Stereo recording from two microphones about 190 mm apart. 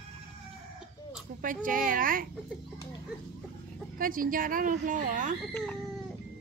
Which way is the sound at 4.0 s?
45° right (ahead or behind).